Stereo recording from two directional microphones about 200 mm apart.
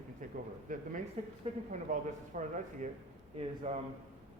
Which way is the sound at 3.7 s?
35° right (ahead or behind).